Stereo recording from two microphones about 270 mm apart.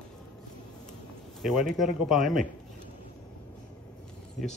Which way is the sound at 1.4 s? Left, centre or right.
Centre.